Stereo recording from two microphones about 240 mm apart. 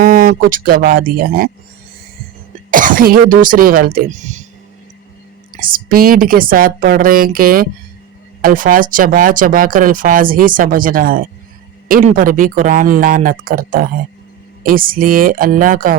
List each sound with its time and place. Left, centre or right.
0.0 s speech: right
2.6 s speech: right
5.5 s speech: right